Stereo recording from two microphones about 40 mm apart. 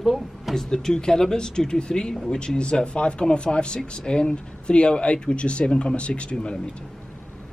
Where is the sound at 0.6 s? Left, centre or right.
Centre.